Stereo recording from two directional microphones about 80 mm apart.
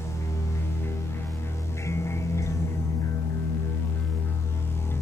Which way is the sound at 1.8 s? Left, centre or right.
Left.